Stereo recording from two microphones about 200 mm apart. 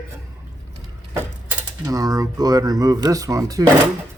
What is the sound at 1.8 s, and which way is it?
Speech, 15° right (ahead or behind).